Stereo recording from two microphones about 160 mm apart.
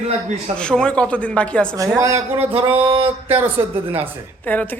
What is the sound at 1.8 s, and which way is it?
Speech, 20° right (ahead or behind).